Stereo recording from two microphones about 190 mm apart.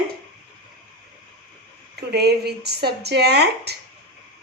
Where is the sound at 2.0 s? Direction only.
60° right (ahead or behind).